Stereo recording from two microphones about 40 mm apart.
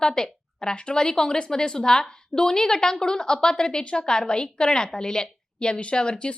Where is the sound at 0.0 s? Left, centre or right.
Centre.